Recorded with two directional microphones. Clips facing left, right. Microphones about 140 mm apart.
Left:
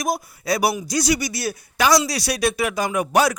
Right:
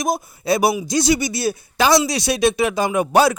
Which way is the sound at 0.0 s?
25° right (ahead or behind).